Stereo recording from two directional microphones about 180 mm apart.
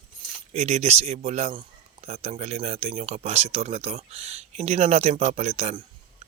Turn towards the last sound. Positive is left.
turn(degrees=-35)  # may be behind; listen again after turning